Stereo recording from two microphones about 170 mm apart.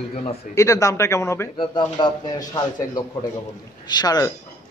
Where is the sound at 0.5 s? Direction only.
20° left (ahead or behind).